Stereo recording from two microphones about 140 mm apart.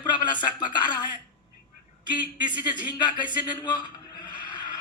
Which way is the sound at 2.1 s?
35° left (ahead or behind).